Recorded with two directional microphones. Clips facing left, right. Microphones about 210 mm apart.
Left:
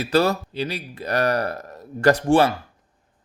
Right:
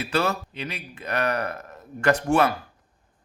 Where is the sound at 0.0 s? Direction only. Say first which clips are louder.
Left 5 dB; 35° left (ahead or behind).